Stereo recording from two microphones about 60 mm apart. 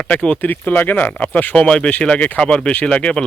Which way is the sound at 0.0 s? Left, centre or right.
Centre.